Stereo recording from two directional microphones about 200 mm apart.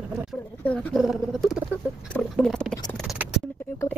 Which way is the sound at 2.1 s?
5° left (ahead or behind).